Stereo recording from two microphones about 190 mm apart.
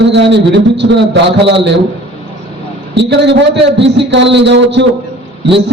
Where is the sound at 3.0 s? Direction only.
65° right (ahead or behind).